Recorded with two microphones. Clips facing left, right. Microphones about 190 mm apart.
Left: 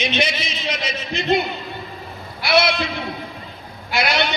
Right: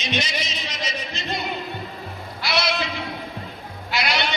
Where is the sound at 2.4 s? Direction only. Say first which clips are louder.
Left 7 dB; 55° left (ahead or behind).